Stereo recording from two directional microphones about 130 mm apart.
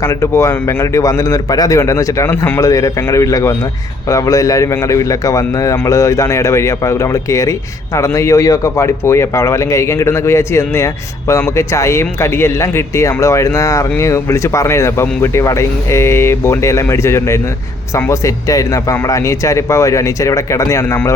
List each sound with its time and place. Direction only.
0.0 s a man's voice: 25° left (ahead or behind)
2.3 s speech: 15° left (ahead or behind)
2.6 s a man's voice: 25° left (ahead or behind)